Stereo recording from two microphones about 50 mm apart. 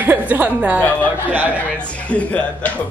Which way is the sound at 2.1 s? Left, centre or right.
Left.